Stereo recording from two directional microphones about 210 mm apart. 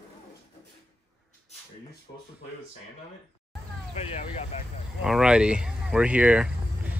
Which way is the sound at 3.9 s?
30° left (ahead or behind).